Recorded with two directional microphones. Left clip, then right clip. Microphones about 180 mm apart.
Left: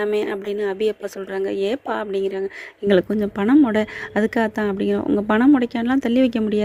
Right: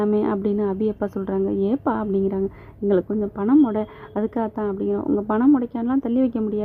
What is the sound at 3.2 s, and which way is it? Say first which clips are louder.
A woman's voice: left 2 dB; 5° left (ahead or behind).